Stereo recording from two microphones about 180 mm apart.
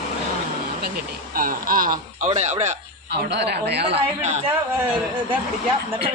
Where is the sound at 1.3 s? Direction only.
50° right (ahead or behind).